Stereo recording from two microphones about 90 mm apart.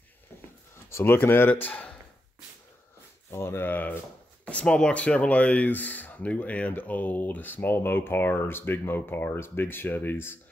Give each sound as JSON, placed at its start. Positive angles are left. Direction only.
{"t": 0.8, "sound": "speech", "side_deg": 30}
{"t": 1.5, "sound": "speech", "side_deg": 15}
{"t": 3.3, "sound": "speech", "side_deg": 30}